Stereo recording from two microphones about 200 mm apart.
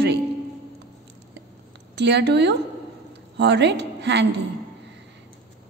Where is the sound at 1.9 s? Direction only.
60° right (ahead or behind).